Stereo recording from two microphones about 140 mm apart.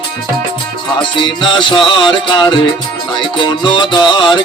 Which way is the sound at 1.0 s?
35° left (ahead or behind).